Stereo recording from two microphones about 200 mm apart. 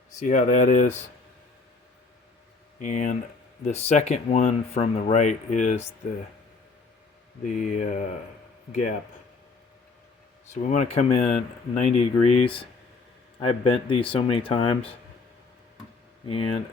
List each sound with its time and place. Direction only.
0.2 s speech: 40° left (ahead or behind)
2.7 s speech: 40° left (ahead or behind)
7.4 s speech: 40° left (ahead or behind)
10.5 s speech: 35° left (ahead or behind)
16.2 s speech: 25° left (ahead or behind)